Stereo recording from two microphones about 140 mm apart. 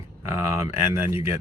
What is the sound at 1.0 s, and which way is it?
Speech, 20° right (ahead or behind).